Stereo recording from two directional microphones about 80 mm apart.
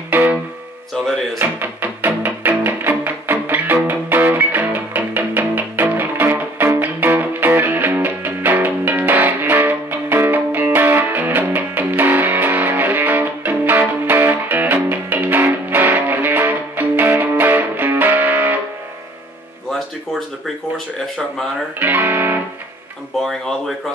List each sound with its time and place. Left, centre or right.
0.9 s speech: centre
1.4 s music: right
19.7 s a sound: centre
21.7 s music: right